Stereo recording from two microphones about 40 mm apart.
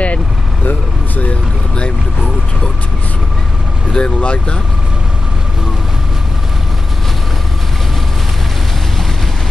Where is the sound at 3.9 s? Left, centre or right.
Left.